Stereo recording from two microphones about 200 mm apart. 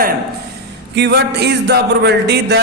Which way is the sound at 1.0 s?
55° right (ahead or behind).